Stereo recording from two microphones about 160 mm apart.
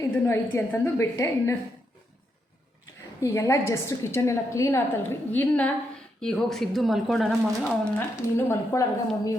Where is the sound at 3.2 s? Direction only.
15° left (ahead or behind).